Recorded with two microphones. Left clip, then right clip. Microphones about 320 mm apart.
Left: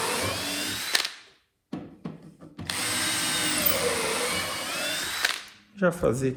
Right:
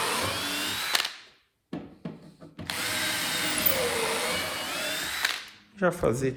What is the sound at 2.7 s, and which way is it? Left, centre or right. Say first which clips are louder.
Drill: left 1 dB; centre.